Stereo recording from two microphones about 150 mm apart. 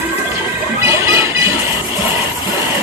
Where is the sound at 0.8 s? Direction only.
20° right (ahead or behind).